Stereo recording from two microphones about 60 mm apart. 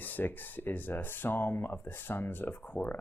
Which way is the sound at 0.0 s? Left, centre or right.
Left.